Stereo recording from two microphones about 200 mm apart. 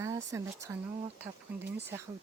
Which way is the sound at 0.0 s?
15° right (ahead or behind).